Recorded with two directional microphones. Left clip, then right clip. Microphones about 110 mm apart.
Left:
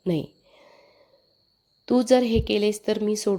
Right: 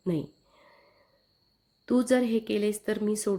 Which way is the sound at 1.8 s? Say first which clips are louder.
Left 6 dB; 15° left (ahead or behind).